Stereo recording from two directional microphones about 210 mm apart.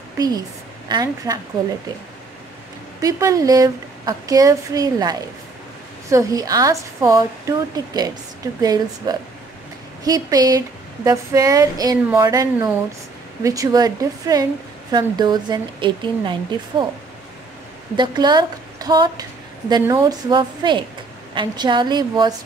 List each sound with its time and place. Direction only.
0.8 s a woman's voice: 20° right (ahead or behind)
3.0 s a woman's voice: 15° right (ahead or behind)
17.9 s speech: 20° right (ahead or behind)